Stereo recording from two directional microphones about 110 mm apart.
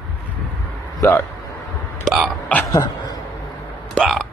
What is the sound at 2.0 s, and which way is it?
Burping, 5° right (ahead or behind).